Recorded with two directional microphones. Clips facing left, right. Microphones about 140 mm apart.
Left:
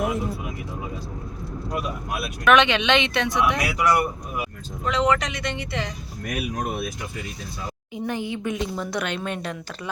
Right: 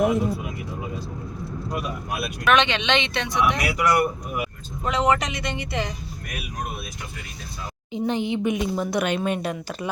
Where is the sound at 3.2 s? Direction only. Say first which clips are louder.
Even; 20° right (ahead or behind).